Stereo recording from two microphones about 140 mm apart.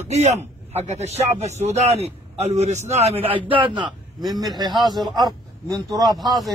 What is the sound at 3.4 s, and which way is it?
A man's voice, 35° right (ahead or behind).